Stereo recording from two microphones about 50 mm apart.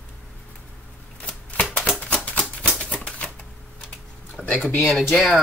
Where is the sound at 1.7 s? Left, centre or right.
Left.